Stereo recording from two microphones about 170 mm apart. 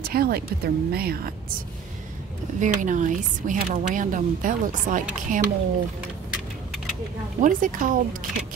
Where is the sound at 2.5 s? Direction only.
50° right (ahead or behind).